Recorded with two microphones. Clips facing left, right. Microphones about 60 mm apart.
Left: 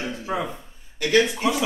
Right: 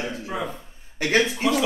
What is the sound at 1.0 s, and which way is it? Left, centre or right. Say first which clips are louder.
Speech: left 2 dB; right.